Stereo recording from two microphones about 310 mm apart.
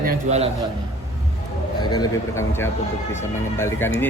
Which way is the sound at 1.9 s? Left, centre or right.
Centre.